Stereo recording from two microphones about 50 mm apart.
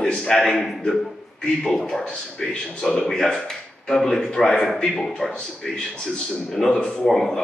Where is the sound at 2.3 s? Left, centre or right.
Centre.